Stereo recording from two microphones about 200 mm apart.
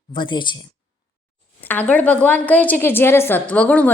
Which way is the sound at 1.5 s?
10° left (ahead or behind).